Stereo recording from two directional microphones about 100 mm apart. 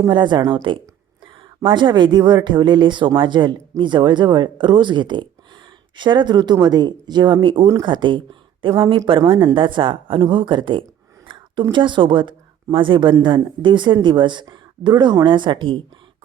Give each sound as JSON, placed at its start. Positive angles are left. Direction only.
{"t": 0.1, "sound": "a woman's voice", "side_deg": -50}